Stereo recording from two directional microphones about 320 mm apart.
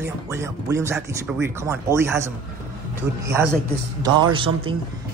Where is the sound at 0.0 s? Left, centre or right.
Centre.